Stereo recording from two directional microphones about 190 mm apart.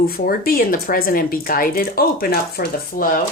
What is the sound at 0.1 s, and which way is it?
Speech, 50° left (ahead or behind).